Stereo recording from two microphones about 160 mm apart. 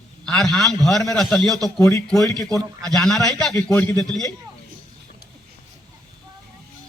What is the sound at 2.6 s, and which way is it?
Speech, 25° right (ahead or behind).